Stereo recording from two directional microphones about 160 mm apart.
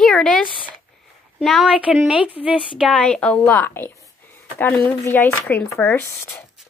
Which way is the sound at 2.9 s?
5° left (ahead or behind).